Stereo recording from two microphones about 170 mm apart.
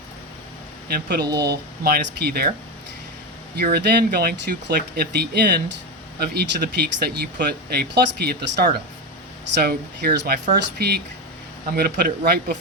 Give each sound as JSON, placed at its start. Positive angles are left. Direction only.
{"t": 0.9, "sound": "speech", "side_deg": -65}
{"t": 3.5, "sound": "speech", "side_deg": -70}